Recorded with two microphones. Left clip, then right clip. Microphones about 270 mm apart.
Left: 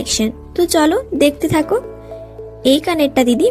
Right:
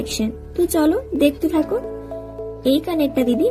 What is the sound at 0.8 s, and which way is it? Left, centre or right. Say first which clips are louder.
Speech: left 4 dB; left.